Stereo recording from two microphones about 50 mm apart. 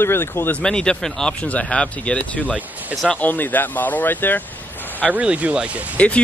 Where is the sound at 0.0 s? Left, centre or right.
Left.